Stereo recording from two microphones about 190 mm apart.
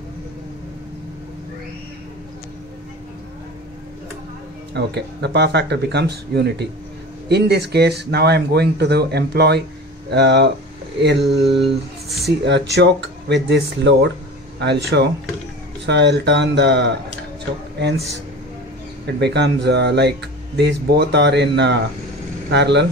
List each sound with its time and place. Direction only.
4.7 s speech: 60° right (ahead or behind)
11.2 s a sound: centre (ahead or behind)
11.7 s speech: centre (ahead or behind)
12.3 s speech: 65° right (ahead or behind)
19.1 s speech: 60° right (ahead or behind)